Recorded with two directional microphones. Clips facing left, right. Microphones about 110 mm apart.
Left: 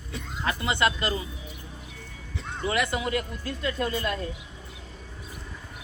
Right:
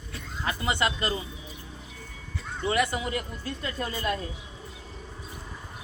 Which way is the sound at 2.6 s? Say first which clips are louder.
Even; 30° right (ahead or behind).